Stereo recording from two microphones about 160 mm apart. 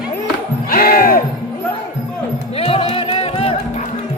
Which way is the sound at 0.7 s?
65° left (ahead or behind).